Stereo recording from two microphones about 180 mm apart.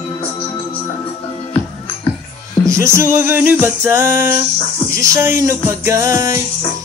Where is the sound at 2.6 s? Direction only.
15° right (ahead or behind).